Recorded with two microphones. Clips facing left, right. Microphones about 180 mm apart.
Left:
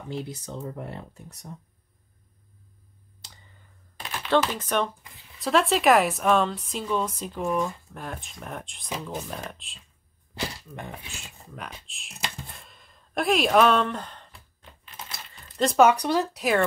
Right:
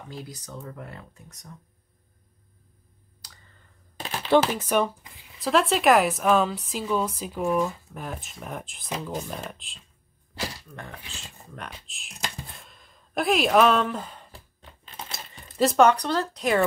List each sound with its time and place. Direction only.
0.1 s speech: 25° left (ahead or behind)
3.2 s clicking: 25° left (ahead or behind)
4.3 s a woman's voice: 10° right (ahead or behind)
10.7 s speech: 20° left (ahead or behind)
11.4 s speech: centre (ahead or behind)
15.5 s a woman's voice: centre (ahead or behind)